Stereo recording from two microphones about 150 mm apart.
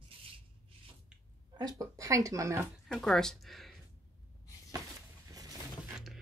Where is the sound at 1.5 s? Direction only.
25° right (ahead or behind).